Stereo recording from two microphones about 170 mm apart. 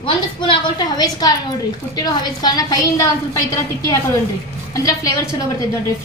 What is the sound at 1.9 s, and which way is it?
A woman's voice, 25° left (ahead or behind).